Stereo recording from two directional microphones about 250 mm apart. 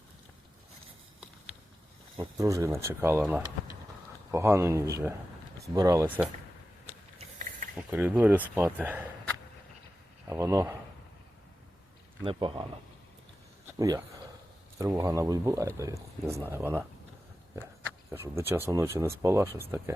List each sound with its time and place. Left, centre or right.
2.1 s speech: centre
7.8 s speech: centre
10.2 s speech: centre
12.2 s speech: centre
13.7 s a sound: centre
14.8 s speech: centre
18.1 s speech: centre